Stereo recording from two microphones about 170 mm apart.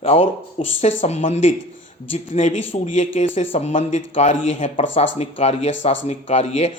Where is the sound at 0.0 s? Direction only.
40° left (ahead or behind).